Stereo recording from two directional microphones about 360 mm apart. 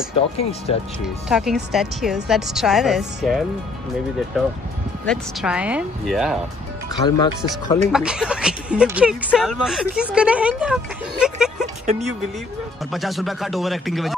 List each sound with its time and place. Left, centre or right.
0.4 s speech: centre
1.0 s speech: centre
5.0 s speech: centre
7.1 s speech: centre
7.9 s speech: centre
11.8 s speech: centre
12.9 s speech: centre